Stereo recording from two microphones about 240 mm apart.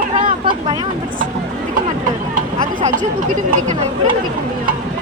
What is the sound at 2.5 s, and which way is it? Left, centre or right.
Speech, right.